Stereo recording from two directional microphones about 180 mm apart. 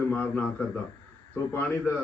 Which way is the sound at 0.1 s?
10° left (ahead or behind).